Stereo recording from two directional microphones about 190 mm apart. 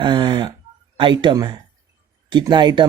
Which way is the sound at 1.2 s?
25° right (ahead or behind).